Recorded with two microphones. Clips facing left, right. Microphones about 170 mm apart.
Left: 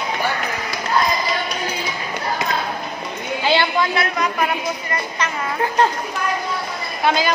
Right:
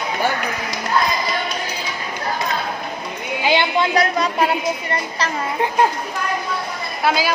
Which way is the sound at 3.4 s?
15° right (ahead or behind).